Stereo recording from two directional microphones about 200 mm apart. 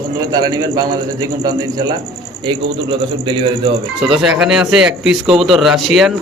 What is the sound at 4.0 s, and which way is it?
Speech, 5° right (ahead or behind).